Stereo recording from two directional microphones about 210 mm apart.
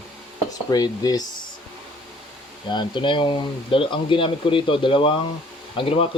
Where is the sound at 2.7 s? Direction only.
20° left (ahead or behind).